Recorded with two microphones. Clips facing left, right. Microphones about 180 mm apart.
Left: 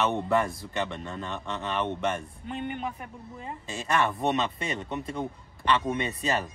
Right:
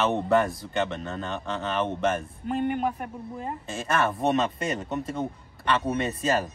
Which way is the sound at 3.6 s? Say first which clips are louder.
Even; centre (ahead or behind).